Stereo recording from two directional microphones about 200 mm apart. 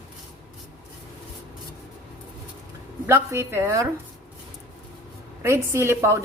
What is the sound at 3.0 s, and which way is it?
Speech, 15° right (ahead or behind).